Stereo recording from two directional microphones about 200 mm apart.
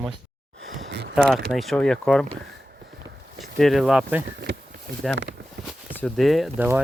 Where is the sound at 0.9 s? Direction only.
55° right (ahead or behind).